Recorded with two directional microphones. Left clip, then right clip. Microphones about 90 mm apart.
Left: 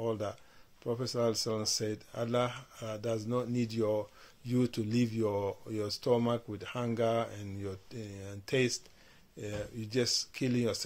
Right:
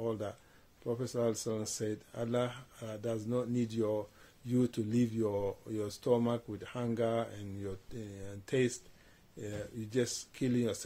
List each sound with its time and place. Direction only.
0.0 s speech: 35° right (ahead or behind)